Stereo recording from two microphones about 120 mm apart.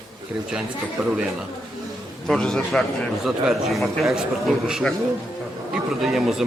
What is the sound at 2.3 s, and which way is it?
A man's voice, 5° left (ahead or behind).